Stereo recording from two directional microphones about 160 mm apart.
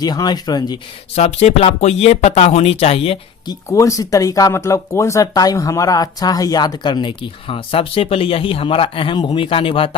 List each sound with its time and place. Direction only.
0.0 s speech: 25° left (ahead or behind)
1.1 s speech: 40° left (ahead or behind)